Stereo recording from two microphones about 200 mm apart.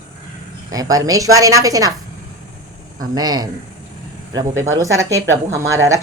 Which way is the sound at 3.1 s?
20° right (ahead or behind).